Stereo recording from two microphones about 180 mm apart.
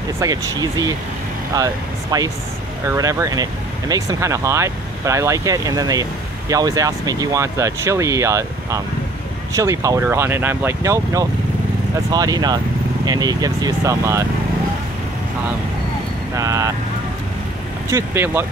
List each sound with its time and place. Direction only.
0.2 s speech: 20° right (ahead or behind)
16.3 s speech: 20° right (ahead or behind)
17.8 s speech: 15° right (ahead or behind)